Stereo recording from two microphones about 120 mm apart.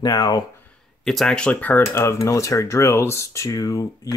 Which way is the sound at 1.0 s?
5° left (ahead or behind).